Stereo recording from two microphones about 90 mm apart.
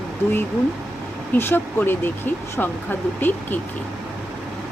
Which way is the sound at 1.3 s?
25° left (ahead or behind).